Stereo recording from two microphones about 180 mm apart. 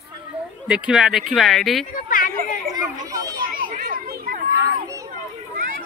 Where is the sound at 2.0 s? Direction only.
50° left (ahead or behind).